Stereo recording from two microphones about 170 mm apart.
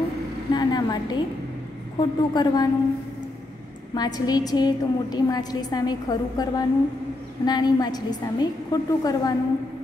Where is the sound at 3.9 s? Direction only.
25° left (ahead or behind).